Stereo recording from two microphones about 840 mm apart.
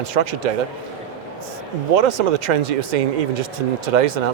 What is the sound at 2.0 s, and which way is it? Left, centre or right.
A man's voice, right.